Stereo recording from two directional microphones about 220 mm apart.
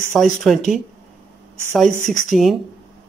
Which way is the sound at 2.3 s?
Centre (ahead or behind).